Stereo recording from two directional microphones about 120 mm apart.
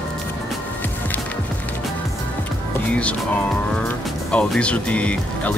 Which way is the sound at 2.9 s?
10° left (ahead or behind).